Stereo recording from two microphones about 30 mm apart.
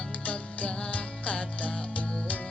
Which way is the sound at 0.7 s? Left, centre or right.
Left.